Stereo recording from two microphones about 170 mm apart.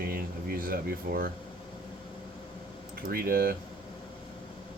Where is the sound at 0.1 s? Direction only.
60° right (ahead or behind).